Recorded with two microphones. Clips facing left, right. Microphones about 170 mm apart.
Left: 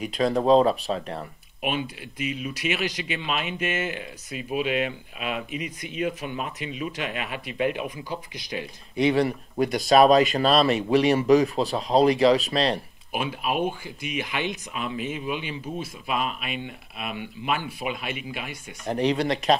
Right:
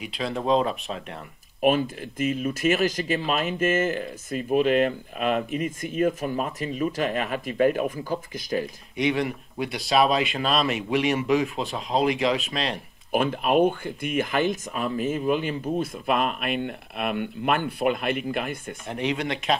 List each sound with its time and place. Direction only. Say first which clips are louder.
0.0 s speech: left 6 dB; 45° left (ahead or behind)
1.6 s speech: right 7 dB; 40° right (ahead or behind)
8.9 s speech: left 3 dB; 35° left (ahead or behind)
13.1 s speech: right 6 dB; 45° right (ahead or behind)
17.6 s speech: right 7 dB; 60° right (ahead or behind)
18.9 s speech: left 4 dB; 35° left (ahead or behind)